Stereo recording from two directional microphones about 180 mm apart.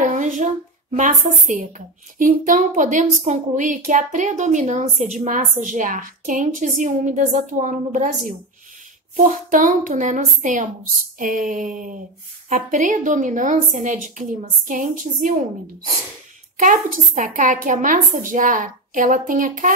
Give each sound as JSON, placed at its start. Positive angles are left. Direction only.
{"t": 0.0, "sound": "a sound", "side_deg": -45}
{"t": 2.1, "sound": "speech", "side_deg": -50}
{"t": 9.1, "sound": "speech", "side_deg": -45}
{"t": 16.5, "sound": "speech", "side_deg": -45}